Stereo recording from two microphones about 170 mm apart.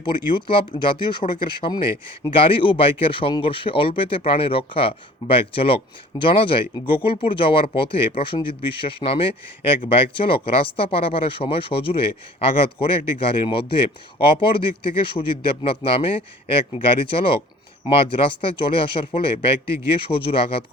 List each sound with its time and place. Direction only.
0.0 s speech: 30° left (ahead or behind)
17.8 s speech: 30° left (ahead or behind)